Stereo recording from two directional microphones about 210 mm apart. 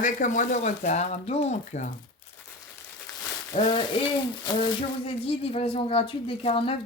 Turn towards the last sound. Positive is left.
turn(degrees=30)  # may be behind; listen again after turning